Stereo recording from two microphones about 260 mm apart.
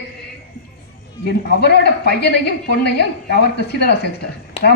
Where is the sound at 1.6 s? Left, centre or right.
Left.